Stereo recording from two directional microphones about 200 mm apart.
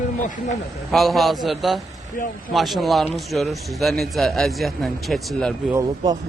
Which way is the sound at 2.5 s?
Centre (ahead or behind).